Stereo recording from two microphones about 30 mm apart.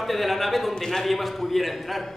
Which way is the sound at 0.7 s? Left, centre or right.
Centre.